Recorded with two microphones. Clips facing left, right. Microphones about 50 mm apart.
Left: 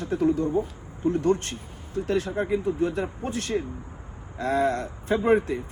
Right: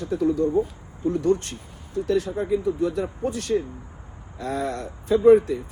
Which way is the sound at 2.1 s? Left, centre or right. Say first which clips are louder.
Right 2 dB; left.